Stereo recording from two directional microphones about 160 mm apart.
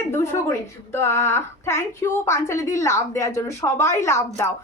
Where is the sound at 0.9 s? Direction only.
15° left (ahead or behind).